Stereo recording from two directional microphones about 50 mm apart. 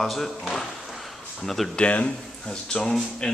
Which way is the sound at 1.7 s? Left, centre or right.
Left.